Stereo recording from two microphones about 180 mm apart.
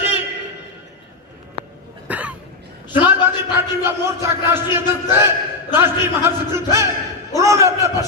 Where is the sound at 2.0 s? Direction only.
10° right (ahead or behind).